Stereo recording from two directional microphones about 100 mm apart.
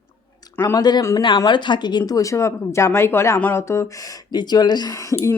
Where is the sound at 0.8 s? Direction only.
45° left (ahead or behind); by 3.8 s 30° left (ahead or behind).